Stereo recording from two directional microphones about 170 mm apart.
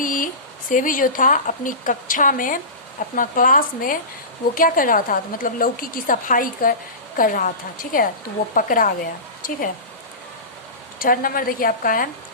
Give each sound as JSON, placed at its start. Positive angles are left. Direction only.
{"t": 0.0, "sound": "a sound", "side_deg": 50}
{"t": 0.7, "sound": "a woman's voice", "side_deg": 50}
{"t": 11.0, "sound": "a woman's voice", "side_deg": 55}